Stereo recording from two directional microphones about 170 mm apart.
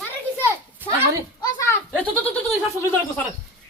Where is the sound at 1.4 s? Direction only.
20° left (ahead or behind).